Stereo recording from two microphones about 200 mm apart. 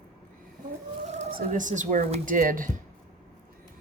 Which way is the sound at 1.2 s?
40° right (ahead or behind).